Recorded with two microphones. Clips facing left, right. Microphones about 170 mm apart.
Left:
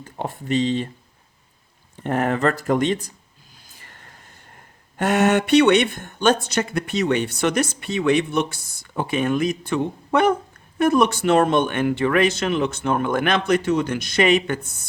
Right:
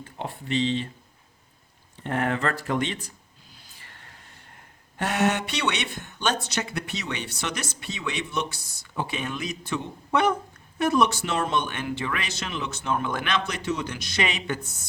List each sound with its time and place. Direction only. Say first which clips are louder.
0.0 s speech: left 5 dB; 45° left (ahead or behind)
2.0 s speech: left 6 dB; 40° left (ahead or behind)
3.7 s a sound: left 5 dB; 45° left (ahead or behind)
4.9 s speech: left 6 dB; 50° left (ahead or behind)